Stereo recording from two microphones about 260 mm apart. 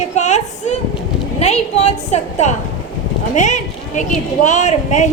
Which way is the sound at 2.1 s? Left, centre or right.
Left.